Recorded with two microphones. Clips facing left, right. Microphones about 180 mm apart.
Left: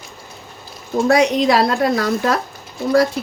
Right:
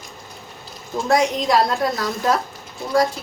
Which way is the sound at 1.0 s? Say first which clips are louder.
Left 4 dB; 70° left (ahead or behind).